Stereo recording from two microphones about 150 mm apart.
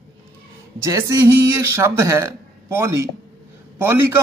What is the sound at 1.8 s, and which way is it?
Speech, 20° right (ahead or behind).